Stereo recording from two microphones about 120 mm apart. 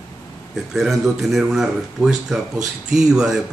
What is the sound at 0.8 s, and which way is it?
Speech, centre (ahead or behind).